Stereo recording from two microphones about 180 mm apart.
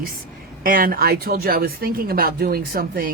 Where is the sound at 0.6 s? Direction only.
50° right (ahead or behind).